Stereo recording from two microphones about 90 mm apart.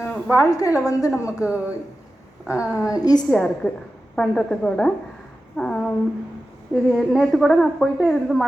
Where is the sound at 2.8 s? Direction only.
40° left (ahead or behind).